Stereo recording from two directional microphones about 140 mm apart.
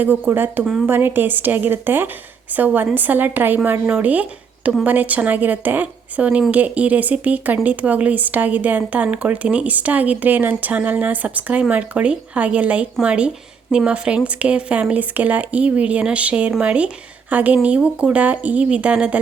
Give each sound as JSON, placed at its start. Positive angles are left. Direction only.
{"t": 0.0, "sound": "a woman's voice", "side_deg": -15}